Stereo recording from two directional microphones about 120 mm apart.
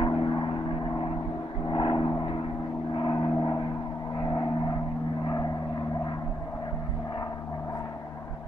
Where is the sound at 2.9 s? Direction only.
40° left (ahead or behind).